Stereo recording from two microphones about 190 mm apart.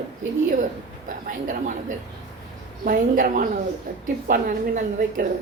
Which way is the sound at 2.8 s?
45° right (ahead or behind).